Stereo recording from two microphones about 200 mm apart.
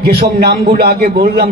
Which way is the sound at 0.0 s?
50° right (ahead or behind).